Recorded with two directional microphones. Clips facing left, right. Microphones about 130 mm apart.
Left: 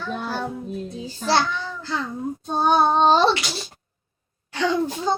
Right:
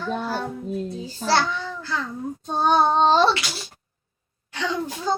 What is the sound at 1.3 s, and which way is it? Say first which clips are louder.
Child singing: left 1 dB; 20° left (ahead or behind).